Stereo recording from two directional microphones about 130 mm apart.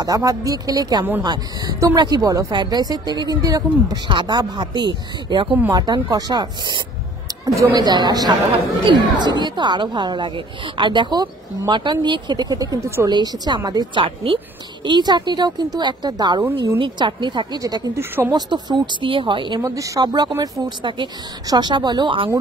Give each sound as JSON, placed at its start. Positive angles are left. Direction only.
{"t": 0.0, "sound": "a woman's voice", "side_deg": -25}
{"t": 14.0, "sound": "a woman's voice", "side_deg": -45}
{"t": 19.6, "sound": "a woman's voice", "side_deg": -25}